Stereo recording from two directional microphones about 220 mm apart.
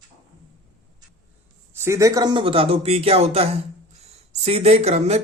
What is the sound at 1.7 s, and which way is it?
Speech, 10° right (ahead or behind).